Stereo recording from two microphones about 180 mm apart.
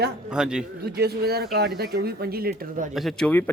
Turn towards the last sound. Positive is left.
turn(degrees=0)  # may be behind; listen again after turning